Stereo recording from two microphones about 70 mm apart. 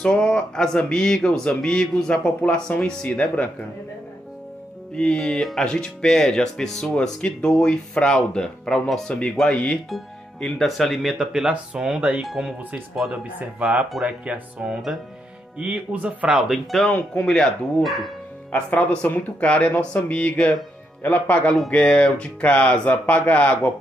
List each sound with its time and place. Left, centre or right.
0.0 s speech: centre
4.9 s speech: centre
12.2 s speech: centre
13.2 s speech: centre
16.4 s speech: centre
16.9 s speech: left
17.8 s speech: centre
18.5 s speech: left